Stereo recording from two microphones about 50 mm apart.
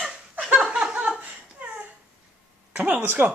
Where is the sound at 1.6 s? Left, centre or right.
Right.